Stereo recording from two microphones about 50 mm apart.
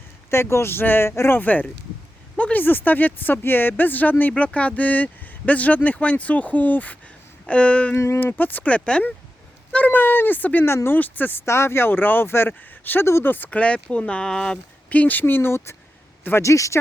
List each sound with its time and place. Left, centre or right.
0.3 s speech: left
1.3 s speech: left
7.4 s a sound: left
7.9 s speech: left
8.2 s speech: left
9.7 s speech: left
11.4 s speech: left
13.5 s a sound: left
13.9 s speech: left
14.8 s speech: left
16.4 s speech: left